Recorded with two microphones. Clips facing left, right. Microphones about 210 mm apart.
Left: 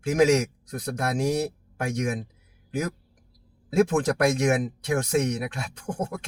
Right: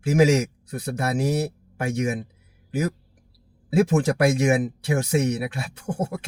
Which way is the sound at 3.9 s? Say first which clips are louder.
Right 2 dB; 5° right (ahead or behind).